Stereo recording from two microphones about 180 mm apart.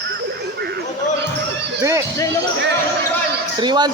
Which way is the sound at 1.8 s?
20° right (ahead or behind).